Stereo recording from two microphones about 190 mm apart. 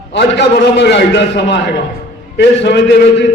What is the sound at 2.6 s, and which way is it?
Speech, 65° left (ahead or behind).